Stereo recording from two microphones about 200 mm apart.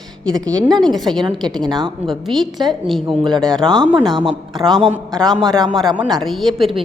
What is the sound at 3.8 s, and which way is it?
Speech, 25° right (ahead or behind).